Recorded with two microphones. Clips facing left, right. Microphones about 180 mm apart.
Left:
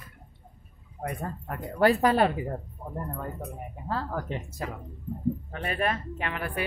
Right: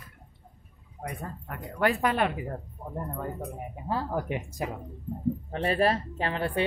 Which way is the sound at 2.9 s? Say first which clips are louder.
Right 1 dB; 10° right (ahead or behind).